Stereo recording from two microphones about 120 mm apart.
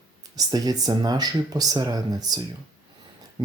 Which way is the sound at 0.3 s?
30° right (ahead or behind).